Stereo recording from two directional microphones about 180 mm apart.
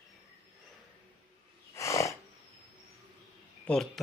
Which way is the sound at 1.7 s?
15° left (ahead or behind).